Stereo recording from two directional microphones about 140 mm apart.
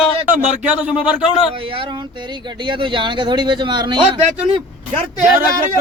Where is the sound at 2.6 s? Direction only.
35° right (ahead or behind).